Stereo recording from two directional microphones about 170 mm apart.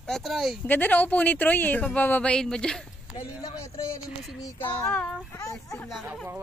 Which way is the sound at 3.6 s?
15° left (ahead or behind).